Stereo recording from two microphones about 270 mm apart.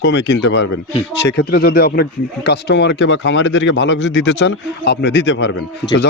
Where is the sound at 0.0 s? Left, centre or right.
Left.